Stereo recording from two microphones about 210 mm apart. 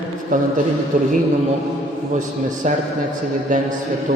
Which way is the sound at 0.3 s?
40° right (ahead or behind).